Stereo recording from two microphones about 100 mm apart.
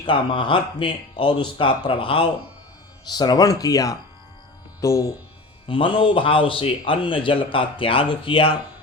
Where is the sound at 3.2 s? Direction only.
45° left (ahead or behind).